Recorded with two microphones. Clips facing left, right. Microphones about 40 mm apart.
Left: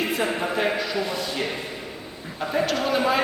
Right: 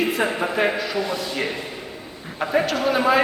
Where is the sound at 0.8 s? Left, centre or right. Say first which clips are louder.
Right 2 dB; centre.